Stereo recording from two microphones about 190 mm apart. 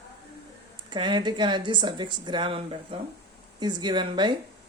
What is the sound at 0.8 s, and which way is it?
Speech, 25° right (ahead or behind).